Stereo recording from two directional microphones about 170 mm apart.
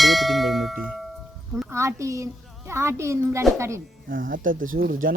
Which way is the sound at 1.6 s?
15° right (ahead or behind).